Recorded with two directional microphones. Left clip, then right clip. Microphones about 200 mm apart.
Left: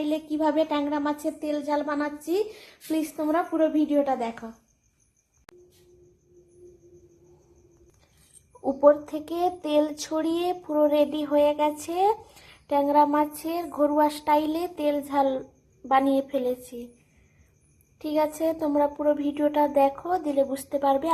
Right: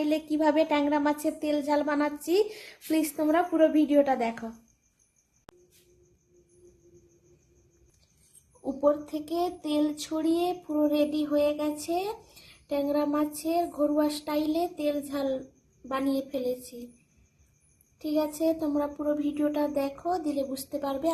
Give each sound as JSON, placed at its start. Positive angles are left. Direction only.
{"t": 0.0, "sound": "speech", "side_deg": -20}
{"t": 5.5, "sound": "a sound", "side_deg": 0}
{"t": 8.6, "sound": "speech", "side_deg": 15}
{"t": 18.0, "sound": "speech", "side_deg": 15}